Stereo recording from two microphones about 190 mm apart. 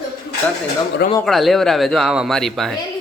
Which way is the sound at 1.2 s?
Centre (ahead or behind).